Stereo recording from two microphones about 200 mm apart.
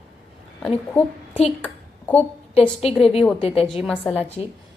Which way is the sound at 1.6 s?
10° left (ahead or behind).